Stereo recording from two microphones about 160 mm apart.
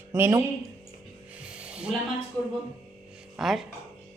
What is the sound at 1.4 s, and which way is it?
Music, 5° right (ahead or behind).